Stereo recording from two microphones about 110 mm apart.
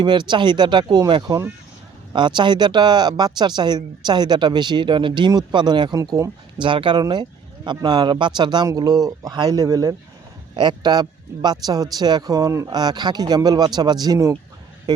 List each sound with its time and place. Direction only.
0.0 s speech: 45° right (ahead or behind)
6.0 s speech: 30° right (ahead or behind)
6.6 s speech: 45° right (ahead or behind); by 9.9 s 30° right (ahead or behind)
10.5 s speech: 40° right (ahead or behind)